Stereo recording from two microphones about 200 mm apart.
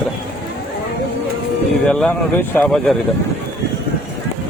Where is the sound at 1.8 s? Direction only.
5° left (ahead or behind).